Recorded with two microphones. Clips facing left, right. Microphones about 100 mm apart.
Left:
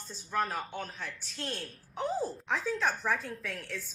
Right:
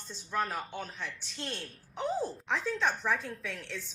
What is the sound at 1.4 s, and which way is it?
Speech, 5° left (ahead or behind).